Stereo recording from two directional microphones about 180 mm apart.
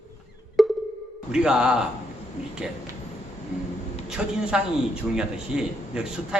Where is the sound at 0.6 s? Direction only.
Centre (ahead or behind).